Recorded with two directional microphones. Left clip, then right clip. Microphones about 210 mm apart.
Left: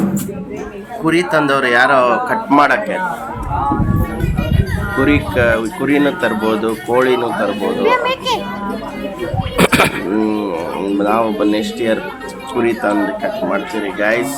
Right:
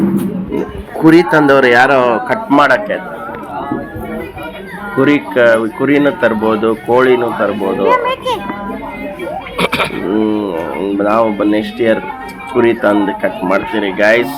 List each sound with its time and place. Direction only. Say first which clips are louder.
1.0 s speech: right 6 dB; 15° right (ahead or behind)
4.9 s speech: right 4 dB; 5° right (ahead or behind)
7.9 s a child's voice: right 2 dB; 40° left (ahead or behind)
9.6 s a sound: left 3 dB; 50° left (ahead or behind)
10.2 s speech: right 4 dB; centre (ahead or behind); by 14.3 s 15° right (ahead or behind)